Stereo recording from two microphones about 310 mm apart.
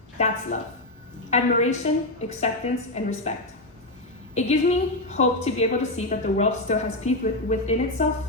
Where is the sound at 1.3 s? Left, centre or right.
Left.